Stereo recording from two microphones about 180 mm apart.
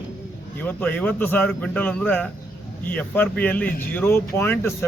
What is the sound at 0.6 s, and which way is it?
Speech, 10° left (ahead or behind).